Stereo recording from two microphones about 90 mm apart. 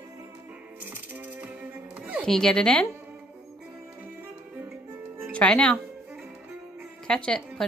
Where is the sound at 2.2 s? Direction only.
5° left (ahead or behind).